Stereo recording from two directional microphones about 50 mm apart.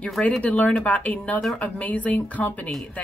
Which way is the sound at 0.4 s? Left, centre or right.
Left.